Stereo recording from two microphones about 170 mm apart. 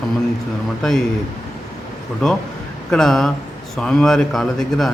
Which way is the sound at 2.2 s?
5° left (ahead or behind).